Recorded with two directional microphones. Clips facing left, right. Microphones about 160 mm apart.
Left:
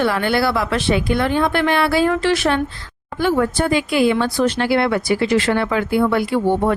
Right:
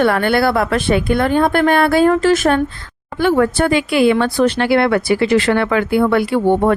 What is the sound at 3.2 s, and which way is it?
Speech, 70° right (ahead or behind).